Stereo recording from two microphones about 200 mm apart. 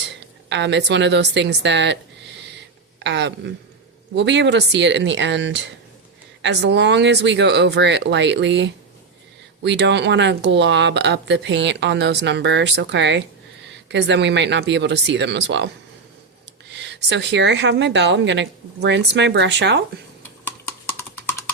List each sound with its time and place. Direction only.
0.4 s speech: 60° right (ahead or behind)
3.0 s speech: 60° right (ahead or behind)
16.8 s speech: 60° right (ahead or behind)
20.9 s wood block: 10° left (ahead or behind)